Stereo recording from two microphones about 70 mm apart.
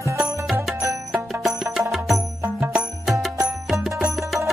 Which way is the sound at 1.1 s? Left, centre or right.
Centre.